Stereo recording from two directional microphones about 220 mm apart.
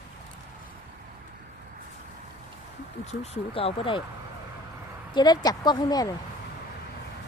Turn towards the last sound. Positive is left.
turn(degrees=20)  # may be behind; listen again after turning